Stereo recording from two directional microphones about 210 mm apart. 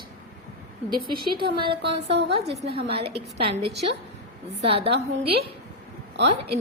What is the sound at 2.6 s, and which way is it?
Speech, 50° right (ahead or behind).